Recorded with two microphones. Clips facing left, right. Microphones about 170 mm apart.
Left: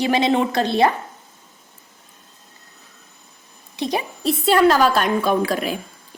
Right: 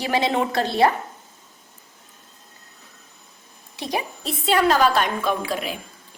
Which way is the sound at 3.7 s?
20° left (ahead or behind).